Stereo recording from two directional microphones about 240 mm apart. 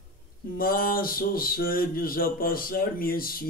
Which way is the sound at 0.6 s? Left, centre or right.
Left.